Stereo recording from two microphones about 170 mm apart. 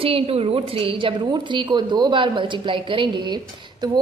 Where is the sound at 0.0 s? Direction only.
35° right (ahead or behind).